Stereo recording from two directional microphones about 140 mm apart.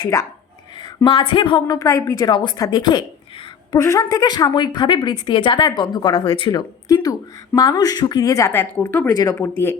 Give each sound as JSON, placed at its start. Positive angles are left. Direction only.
{"t": 0.8, "sound": "a woman's voice", "side_deg": 35}